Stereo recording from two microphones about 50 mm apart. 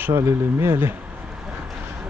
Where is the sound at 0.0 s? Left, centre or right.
Right.